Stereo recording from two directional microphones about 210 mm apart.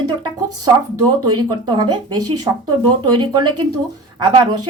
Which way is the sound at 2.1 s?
90° right.